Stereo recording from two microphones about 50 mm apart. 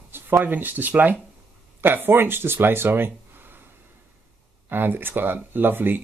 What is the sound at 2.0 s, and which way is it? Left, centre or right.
Speech, right.